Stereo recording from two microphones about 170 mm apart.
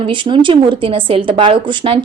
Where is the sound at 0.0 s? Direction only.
30° right (ahead or behind).